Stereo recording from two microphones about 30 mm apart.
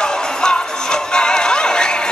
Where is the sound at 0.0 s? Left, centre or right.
Left.